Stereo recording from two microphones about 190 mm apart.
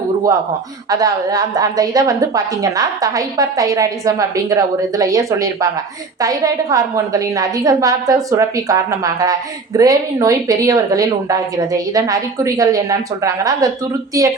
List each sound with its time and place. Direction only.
0.9 s a woman's voice: 20° right (ahead or behind)